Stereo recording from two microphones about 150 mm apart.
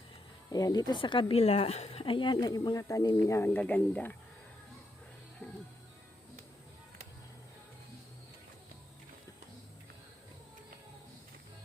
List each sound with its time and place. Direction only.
0.5 s speech: 25° left (ahead or behind)